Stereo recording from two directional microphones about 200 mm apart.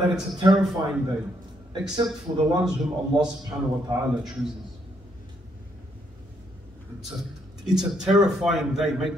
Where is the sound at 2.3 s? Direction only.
25° right (ahead or behind).